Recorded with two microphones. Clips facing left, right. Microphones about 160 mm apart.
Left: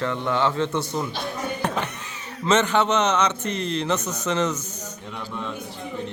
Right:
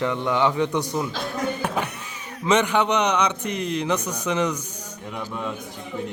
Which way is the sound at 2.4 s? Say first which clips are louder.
Even; 15° right (ahead or behind).